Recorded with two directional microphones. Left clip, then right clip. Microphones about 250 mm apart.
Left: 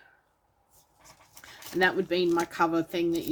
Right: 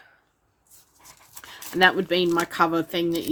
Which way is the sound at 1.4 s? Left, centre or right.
Centre.